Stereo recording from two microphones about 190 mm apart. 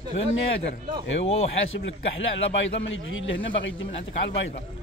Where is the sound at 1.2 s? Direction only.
30° left (ahead or behind).